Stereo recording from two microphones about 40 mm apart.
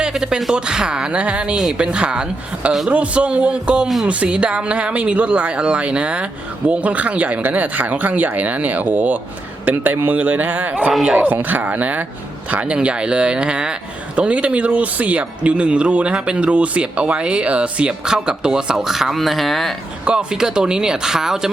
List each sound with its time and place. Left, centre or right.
0.0 s a sound: centre
0.5 s a man's voice: right
12.5 s speech: right
18.0 s speech: centre
20.1 s speech: centre